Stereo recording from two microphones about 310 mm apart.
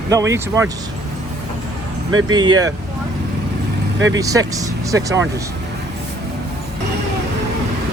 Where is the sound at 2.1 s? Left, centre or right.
Right.